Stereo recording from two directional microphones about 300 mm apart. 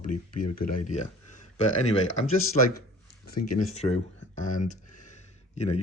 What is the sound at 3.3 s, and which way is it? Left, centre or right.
Speech, left.